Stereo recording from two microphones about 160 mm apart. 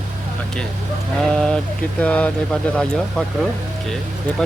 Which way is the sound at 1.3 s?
5° left (ahead or behind).